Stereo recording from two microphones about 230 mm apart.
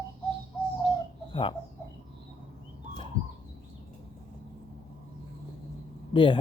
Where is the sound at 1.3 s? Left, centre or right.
Left.